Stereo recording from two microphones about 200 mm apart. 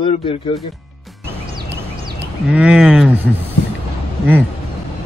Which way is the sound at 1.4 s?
55° right (ahead or behind).